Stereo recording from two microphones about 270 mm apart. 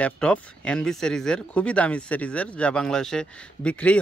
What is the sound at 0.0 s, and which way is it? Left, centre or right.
Speech, centre.